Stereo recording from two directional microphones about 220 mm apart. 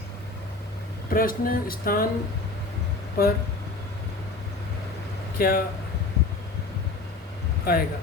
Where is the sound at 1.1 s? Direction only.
40° left (ahead or behind).